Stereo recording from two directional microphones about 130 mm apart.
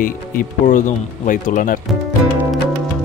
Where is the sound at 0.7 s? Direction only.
75° left (ahead or behind).